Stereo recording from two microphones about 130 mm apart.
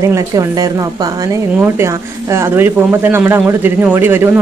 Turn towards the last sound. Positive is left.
turn(degrees=-15)  # may be behind; listen again after turning